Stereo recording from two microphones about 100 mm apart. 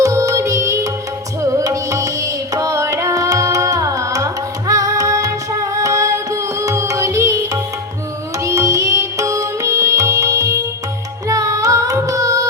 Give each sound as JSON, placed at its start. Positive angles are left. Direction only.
{"t": 0.0, "sound": "music", "side_deg": -35}
{"t": 1.5, "sound": "carnatic music", "side_deg": -35}
{"t": 4.7, "sound": "music", "side_deg": -35}